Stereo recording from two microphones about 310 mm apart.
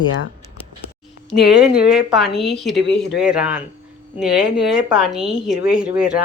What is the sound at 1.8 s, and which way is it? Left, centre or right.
Speech, centre.